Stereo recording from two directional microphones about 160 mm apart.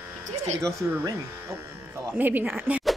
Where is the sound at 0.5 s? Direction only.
20° right (ahead or behind).